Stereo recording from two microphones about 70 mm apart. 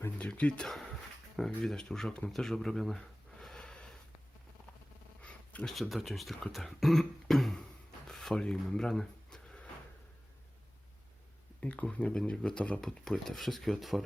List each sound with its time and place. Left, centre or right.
0.2 s speech: centre
5.2 s a sound: left
5.6 s speech: centre
8.0 s a sound: centre
11.6 s speech: centre
12.8 s speech: centre